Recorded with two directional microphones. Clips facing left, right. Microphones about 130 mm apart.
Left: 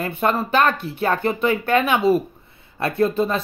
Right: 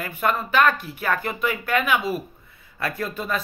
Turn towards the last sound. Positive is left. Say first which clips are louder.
# left 8 dB
turn(degrees=30)  # may be behind; listen again after turning